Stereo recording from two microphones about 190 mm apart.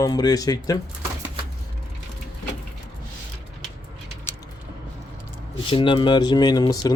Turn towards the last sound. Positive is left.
turn(degrees=20)  # may be behind; listen again after turning